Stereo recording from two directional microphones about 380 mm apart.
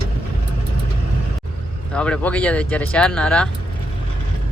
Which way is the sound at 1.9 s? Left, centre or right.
Centre.